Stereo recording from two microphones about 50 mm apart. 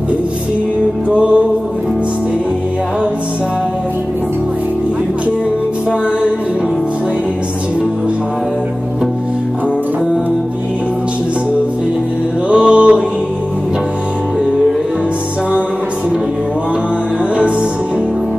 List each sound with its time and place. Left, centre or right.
1.1 s music: right
12.4 s music: right